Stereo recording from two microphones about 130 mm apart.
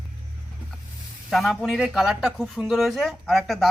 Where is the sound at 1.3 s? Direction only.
Centre (ahead or behind).